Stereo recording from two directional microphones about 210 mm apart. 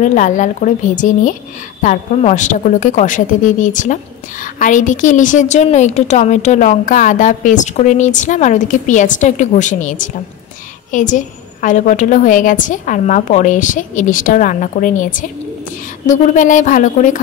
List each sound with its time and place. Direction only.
0.0 s a woman's voice: 35° left (ahead or behind)